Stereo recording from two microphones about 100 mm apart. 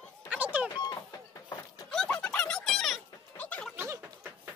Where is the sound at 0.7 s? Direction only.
40° left (ahead or behind).